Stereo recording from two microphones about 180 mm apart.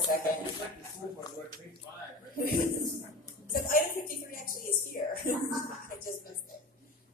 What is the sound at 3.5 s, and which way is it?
Music, 50° left (ahead or behind).